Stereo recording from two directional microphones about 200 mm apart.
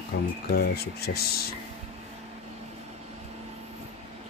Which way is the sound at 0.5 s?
50° left (ahead or behind).